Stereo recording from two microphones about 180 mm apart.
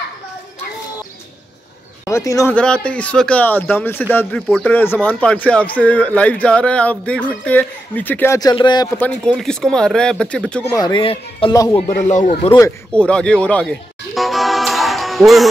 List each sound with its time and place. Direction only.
2.0 s speech: 15° left (ahead or behind)
2.5 s speech: 5° left (ahead or behind); by 8.8 s 25° left (ahead or behind)
8.9 s speech: 5° left (ahead or behind)
10.7 s speech: 25° left (ahead or behind)
11.9 s speech: 45° left (ahead or behind)
12.4 s a sound: 15° left (ahead or behind)